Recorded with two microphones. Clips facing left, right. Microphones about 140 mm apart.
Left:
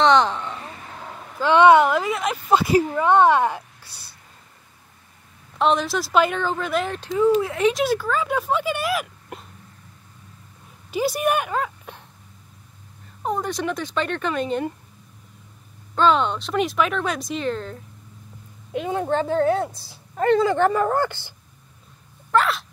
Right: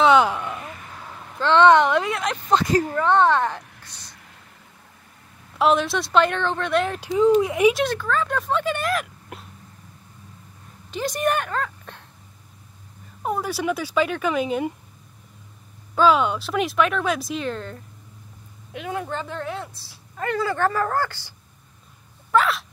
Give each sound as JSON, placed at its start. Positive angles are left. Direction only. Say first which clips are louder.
{"t": 0.0, "sound": "a sound", "louder": "right 1 dB", "side_deg": -10}
{"t": 1.4, "sound": "speech", "louder": "left 1 dB", "side_deg": 10}
{"t": 5.6, "sound": "speech", "louder": "right 1 dB", "side_deg": 0}
{"t": 7.0, "sound": "speech", "louder": "right 1 dB", "side_deg": -15}
{"t": 7.7, "sound": "speech", "louder": "left 1 dB", "side_deg": 5}
{"t": 10.9, "sound": "speech", "louder": "left 2 dB", "side_deg": 5}
{"t": 13.2, "sound": "speech", "louder": "even", "side_deg": -5}
{"t": 15.9, "sound": "speech", "louder": "right 1 dB", "side_deg": -5}
{"t": 18.7, "sound": "speech", "louder": "left 6 dB", "side_deg": 25}
{"t": 19.9, "sound": "speech", "louder": "left 8 dB", "side_deg": 20}
{"t": 22.3, "sound": "speech", "louder": "even", "side_deg": 0}